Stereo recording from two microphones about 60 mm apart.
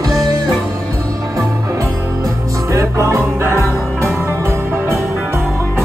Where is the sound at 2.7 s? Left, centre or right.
Right.